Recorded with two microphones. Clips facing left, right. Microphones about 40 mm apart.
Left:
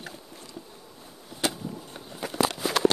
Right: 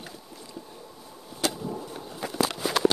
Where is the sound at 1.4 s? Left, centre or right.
Centre.